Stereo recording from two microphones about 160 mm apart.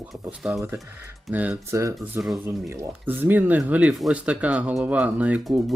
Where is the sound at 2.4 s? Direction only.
15° right (ahead or behind).